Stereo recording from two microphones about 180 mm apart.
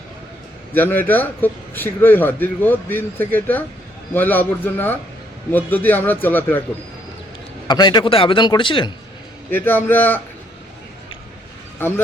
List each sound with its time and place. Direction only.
0.7 s a man's voice: 10° left (ahead or behind)
7.7 s a man's voice: 25° left (ahead or behind)
9.5 s a man's voice: 10° left (ahead or behind)